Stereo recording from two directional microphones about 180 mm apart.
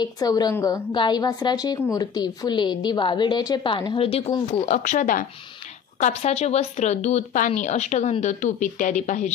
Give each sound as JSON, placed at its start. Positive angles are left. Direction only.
{"t": 0.0, "sound": "a woman's voice", "side_deg": 20}
{"t": 4.7, "sound": "speech", "side_deg": 45}